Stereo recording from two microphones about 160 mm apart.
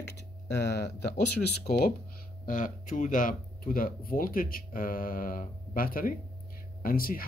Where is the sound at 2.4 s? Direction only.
55° left (ahead or behind).